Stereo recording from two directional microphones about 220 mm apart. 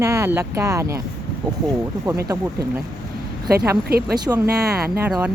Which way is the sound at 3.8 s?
45° right (ahead or behind).